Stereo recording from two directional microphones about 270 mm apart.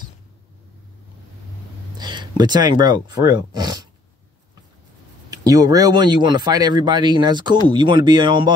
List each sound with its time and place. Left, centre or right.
2.0 s speech: centre
5.3 s speech: centre